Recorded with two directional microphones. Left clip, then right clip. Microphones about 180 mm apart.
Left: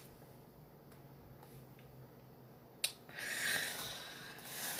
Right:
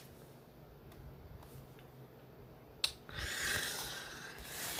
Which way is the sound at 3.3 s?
40° right (ahead or behind).